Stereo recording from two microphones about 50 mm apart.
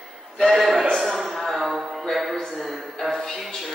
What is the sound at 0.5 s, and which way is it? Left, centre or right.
Speech, centre.